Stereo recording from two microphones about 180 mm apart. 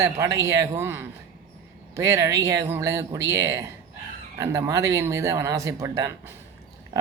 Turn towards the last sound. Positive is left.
turn(degrees=-15)  # may be behind; listen again after turning